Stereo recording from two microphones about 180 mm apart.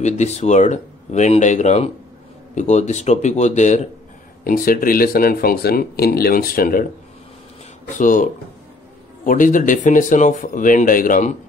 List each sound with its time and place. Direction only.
0.0 s speech: 40° left (ahead or behind)
4.5 s speech: 50° left (ahead or behind)
8.0 s speech: 45° left (ahead or behind)